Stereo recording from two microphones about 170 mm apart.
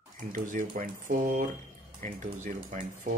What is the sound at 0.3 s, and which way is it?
Speech, 50° right (ahead or behind).